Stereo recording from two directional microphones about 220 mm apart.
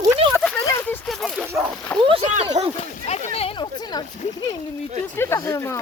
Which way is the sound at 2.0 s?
25° right (ahead or behind).